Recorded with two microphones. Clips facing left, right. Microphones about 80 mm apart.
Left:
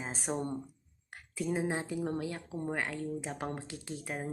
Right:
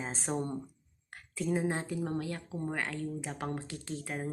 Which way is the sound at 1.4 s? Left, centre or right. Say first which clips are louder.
Right 1 dB; centre.